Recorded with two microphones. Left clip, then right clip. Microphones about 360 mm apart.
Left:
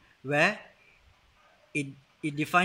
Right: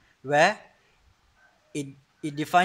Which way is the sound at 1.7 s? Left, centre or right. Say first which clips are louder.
Left 2 dB; right.